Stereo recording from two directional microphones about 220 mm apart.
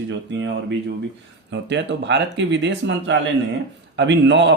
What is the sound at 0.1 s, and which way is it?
Speech, 55° right (ahead or behind).